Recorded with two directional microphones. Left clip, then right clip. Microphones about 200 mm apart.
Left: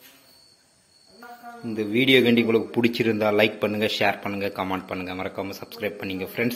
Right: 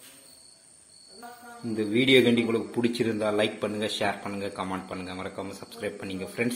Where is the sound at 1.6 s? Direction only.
10° left (ahead or behind).